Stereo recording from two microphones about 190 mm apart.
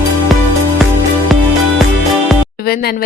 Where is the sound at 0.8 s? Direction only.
Centre (ahead or behind).